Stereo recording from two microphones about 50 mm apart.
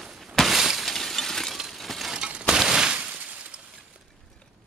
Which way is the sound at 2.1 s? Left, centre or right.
Right.